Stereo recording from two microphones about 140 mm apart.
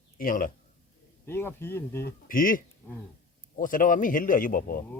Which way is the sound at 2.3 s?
80° left.